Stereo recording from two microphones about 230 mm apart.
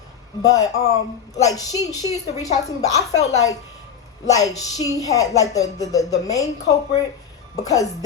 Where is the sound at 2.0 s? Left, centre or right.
Centre.